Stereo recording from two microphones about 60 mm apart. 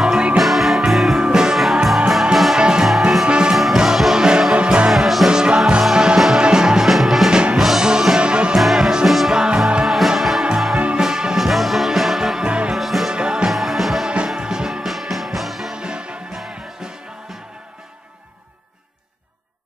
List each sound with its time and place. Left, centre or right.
0.0 s music: centre
2.6 s music: centre
3.3 s music: centre
4.9 s music: centre
7.2 s music: centre
8.5 s music: centre
9.8 s music: centre
12.4 s music: centre
12.7 s music: centre
13.1 s music: centre
13.5 s music: centre
14.1 s music: centre
15.7 s music: centre